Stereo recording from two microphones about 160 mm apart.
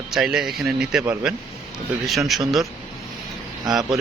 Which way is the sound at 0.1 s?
5° right (ahead or behind).